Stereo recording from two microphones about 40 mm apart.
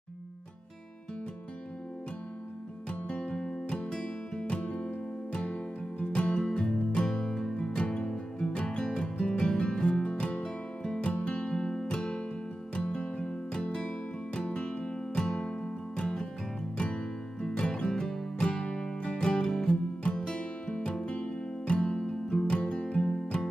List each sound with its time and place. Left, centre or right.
3.1 s music: left
11.1 s music: left
23.0 s music: centre